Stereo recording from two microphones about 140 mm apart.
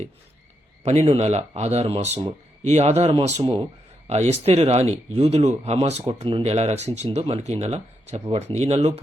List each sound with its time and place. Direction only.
0.9 s speech: 45° right (ahead or behind)